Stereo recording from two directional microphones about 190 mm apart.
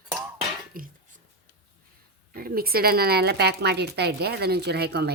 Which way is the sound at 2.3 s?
50° right (ahead or behind).